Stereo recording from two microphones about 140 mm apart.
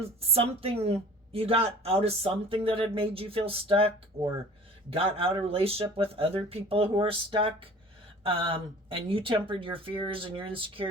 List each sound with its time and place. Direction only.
0.2 s speech: 45° right (ahead or behind)